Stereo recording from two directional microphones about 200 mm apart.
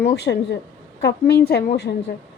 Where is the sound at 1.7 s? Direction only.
55° left (ahead or behind).